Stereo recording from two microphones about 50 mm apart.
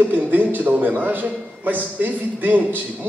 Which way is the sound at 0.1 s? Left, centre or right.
Right.